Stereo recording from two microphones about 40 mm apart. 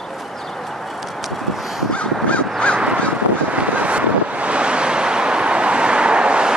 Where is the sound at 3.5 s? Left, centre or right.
Right.